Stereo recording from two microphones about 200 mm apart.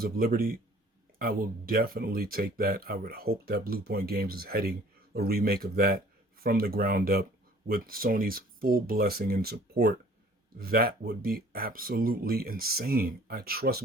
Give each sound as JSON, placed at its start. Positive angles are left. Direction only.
{"t": 0.0, "sound": "speech", "side_deg": -50}